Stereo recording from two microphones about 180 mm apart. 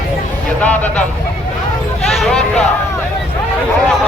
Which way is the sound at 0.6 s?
10° left (ahead or behind).